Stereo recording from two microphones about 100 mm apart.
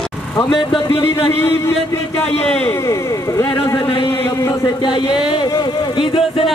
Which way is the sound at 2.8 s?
30° left (ahead or behind).